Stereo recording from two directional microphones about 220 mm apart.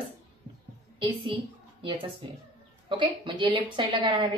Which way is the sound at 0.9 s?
20° right (ahead or behind).